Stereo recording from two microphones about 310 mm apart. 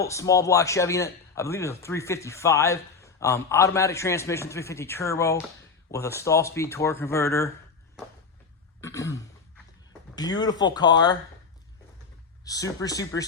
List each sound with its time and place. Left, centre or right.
0.0 s a man's voice: centre
8.8 s throat clearing: centre
10.2 s a man's voice: centre
12.5 s a man's voice: centre